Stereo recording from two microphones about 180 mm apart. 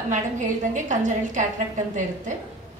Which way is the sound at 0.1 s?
45° right (ahead or behind).